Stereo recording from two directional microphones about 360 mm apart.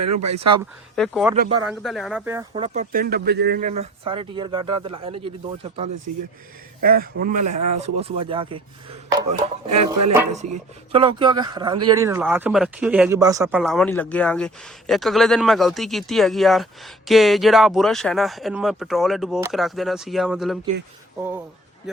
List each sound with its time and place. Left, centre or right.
0.0 s speech: right
0.9 s speech: centre
1.4 s speech: centre
1.7 s speech: centre
2.5 s speech: centre